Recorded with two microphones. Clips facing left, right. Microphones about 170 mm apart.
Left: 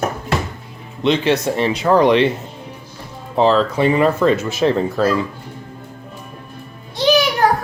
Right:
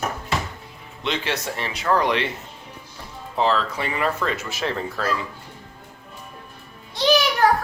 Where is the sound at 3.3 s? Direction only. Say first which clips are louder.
Left 7 dB; 25° left (ahead or behind).